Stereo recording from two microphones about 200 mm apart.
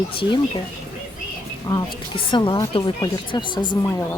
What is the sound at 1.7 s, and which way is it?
A woman's voice, 20° left (ahead or behind).